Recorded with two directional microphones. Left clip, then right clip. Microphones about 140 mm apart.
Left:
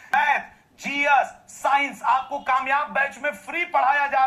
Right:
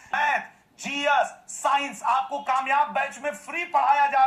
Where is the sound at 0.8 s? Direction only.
25° left (ahead or behind).